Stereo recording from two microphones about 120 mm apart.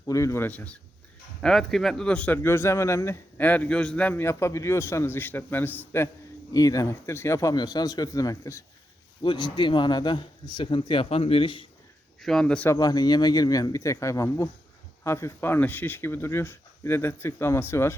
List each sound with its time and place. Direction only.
0.0 s a man's voice: 25° left (ahead or behind)
6.5 s speech: 30° left (ahead or behind)
9.2 s speech: 40° left (ahead or behind)
12.2 s a man's voice: 5° left (ahead or behind)
12.7 s speech: 35° left (ahead or behind)